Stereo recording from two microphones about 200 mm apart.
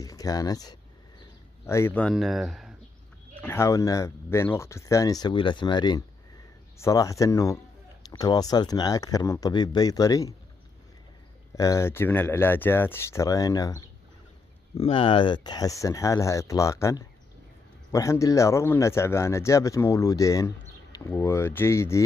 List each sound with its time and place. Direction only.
0.0 s speech: 15° left (ahead or behind); by 2.7 s centre (ahead or behind)
3.3 s speech: 10° left (ahead or behind)
11.5 s speech: 15° left (ahead or behind)